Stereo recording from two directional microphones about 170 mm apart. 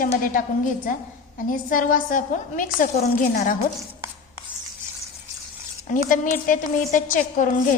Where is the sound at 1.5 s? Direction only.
55° left (ahead or behind).